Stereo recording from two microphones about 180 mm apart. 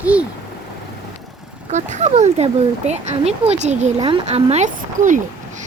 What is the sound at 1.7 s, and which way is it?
Speech, 40° right (ahead or behind).